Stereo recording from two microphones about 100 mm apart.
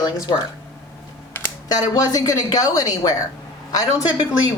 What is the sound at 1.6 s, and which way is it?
Speech, 40° left (ahead or behind).